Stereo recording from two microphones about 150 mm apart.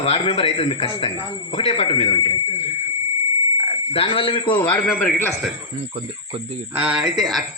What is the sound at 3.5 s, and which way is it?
Speech, 45° left (ahead or behind).